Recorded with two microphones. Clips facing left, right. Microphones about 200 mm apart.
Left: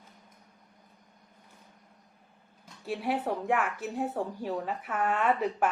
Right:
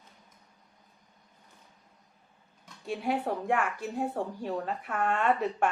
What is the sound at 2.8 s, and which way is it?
A woman's voice, centre (ahead or behind).